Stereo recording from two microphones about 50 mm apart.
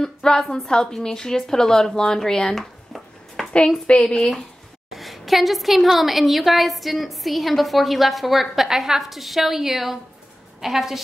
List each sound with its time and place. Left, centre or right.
0.0 s a woman's voice: centre
3.8 s a woman's voice: centre
4.9 s a woman's voice: centre